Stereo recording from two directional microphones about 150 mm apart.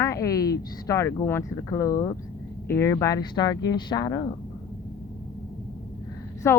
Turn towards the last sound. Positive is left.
turn(degrees=15)  # may be behind; listen again after turning